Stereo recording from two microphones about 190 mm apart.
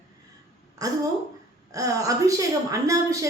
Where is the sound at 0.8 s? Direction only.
20° right (ahead or behind).